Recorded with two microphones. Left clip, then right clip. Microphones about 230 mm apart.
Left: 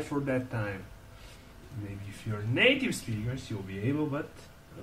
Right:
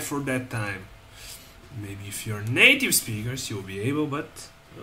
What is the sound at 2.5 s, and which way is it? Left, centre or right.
Speech, centre.